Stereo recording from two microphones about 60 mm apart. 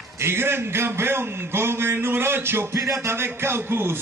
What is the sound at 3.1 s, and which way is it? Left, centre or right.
Speech, right.